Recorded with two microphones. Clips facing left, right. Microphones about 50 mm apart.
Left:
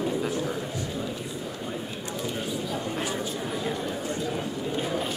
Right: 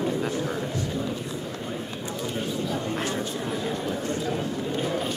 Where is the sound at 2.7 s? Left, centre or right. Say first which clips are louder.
Right 2 dB; centre.